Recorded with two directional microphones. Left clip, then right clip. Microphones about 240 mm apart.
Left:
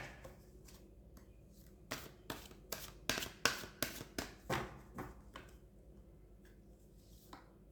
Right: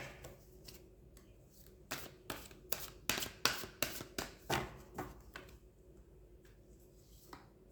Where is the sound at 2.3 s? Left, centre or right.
Centre.